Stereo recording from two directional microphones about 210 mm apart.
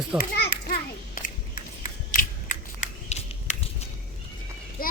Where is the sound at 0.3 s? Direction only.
50° left (ahead or behind).